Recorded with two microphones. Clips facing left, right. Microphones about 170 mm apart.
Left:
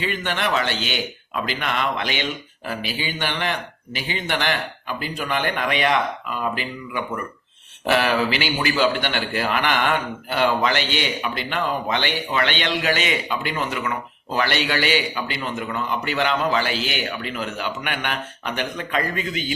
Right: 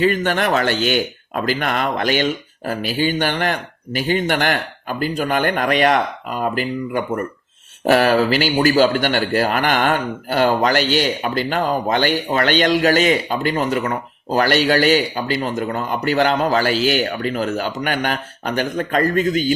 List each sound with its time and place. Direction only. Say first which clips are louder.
0.0 s a man's voice: right 8 dB; 45° right (ahead or behind)